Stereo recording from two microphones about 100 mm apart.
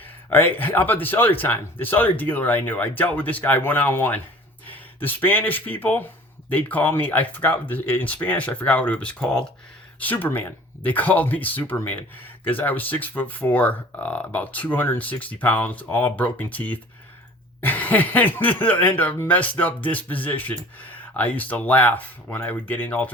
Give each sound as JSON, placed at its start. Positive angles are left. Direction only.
{"t": 0.0, "sound": "speech", "side_deg": 20}
{"t": 10.0, "sound": "speech", "side_deg": 20}